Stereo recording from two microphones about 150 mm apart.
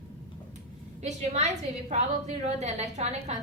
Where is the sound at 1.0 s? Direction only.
50° right (ahead or behind).